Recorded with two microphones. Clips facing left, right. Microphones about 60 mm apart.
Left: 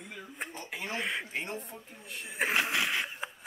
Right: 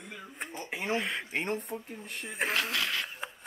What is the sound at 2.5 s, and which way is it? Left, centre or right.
Speech, centre.